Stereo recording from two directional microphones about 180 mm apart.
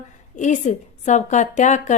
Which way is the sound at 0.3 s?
40° left (ahead or behind).